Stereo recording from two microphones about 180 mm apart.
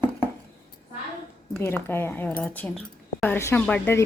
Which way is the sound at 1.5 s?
10° left (ahead or behind).